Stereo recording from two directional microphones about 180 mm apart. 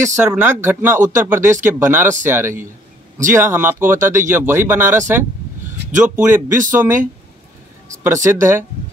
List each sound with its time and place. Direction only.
0.0 s speech: 15° right (ahead or behind)
8.0 s speech: 15° right (ahead or behind)